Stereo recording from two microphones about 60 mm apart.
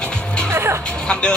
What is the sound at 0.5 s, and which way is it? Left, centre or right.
Music, right.